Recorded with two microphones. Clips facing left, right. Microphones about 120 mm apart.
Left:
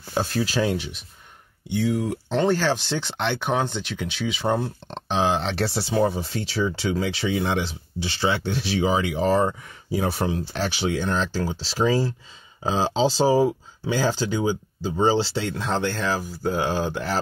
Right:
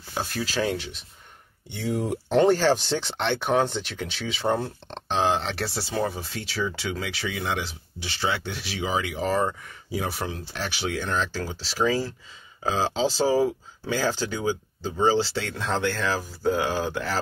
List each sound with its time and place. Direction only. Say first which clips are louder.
0.1 s speech: left 5 dB; 25° left (ahead or behind)
1.7 s speech: left 4 dB; centre (ahead or behind); by 17.2 s 20° left (ahead or behind)